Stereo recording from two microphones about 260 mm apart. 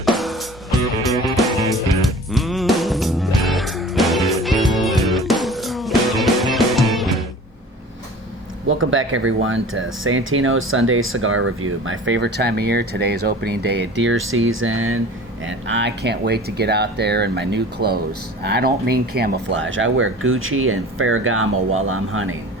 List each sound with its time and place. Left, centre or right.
0.0 s music: centre
8.6 s speech: right